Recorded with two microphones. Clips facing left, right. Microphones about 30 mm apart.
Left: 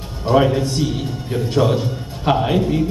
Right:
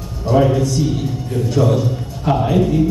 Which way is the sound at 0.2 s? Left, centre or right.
Left.